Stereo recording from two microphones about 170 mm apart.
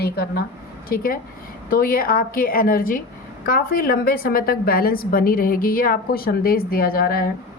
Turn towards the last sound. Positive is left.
turn(degrees=60)  # may be behind; listen again after turning